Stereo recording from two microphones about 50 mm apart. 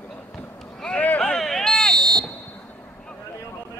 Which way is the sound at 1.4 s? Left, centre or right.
Centre.